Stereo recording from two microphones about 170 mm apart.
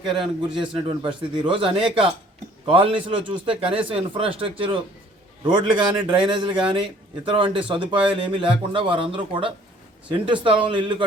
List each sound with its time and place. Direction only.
0.2 s a man's voice: 30° right (ahead or behind)